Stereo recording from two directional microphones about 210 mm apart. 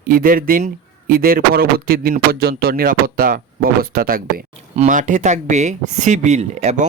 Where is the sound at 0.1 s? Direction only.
45° right (ahead or behind).